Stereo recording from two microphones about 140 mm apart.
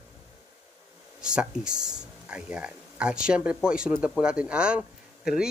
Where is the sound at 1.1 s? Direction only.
5° right (ahead or behind).